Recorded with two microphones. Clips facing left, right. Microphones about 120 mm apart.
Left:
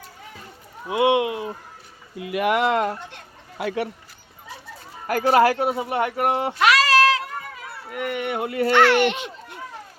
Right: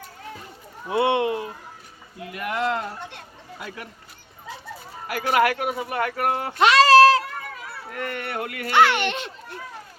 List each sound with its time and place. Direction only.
0.9 s speech: 10° left (ahead or behind)
2.3 s speech: 90° left
3.6 s speech: 90° left
5.0 s speech: 40° left (ahead or behind); by 6.6 s 20° left (ahead or behind)
6.6 s a sound: 30° right (ahead or behind)
7.9 s speech: 10° left (ahead or behind)
8.7 s a child's voice: centre (ahead or behind)